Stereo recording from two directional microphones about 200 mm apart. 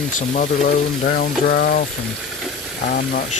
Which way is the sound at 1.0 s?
50° left (ahead or behind).